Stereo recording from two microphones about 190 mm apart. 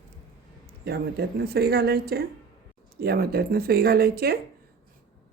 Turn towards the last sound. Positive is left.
turn(degrees=-55)  # may be behind; listen again after turning